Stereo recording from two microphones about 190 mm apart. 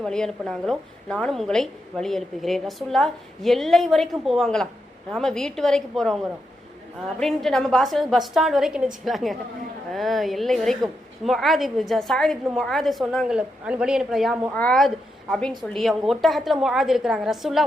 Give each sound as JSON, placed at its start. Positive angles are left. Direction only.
{"t": 0.0, "sound": "a woman's voice", "side_deg": 5}
{"t": 7.2, "sound": "a woman's voice", "side_deg": 0}